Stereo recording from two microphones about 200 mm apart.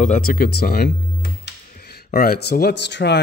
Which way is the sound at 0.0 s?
40° left (ahead or behind).